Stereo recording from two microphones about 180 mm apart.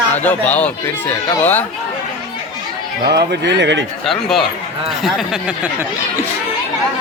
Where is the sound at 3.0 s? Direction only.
65° right (ahead or behind).